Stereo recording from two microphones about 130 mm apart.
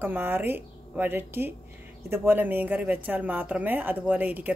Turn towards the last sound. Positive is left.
turn(degrees=-15)  # may be behind; listen again after turning